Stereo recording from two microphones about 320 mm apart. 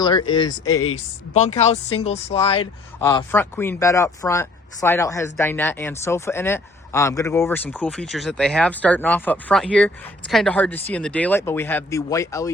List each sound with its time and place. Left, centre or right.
0.0 s speech: centre
3.0 s speech: centre